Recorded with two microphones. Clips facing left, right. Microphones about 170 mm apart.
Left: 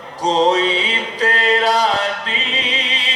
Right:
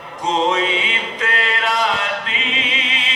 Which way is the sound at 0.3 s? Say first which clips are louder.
Left 3 dB; 35° left (ahead or behind).